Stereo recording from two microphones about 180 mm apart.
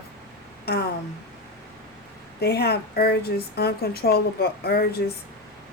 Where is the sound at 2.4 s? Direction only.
65° left (ahead or behind).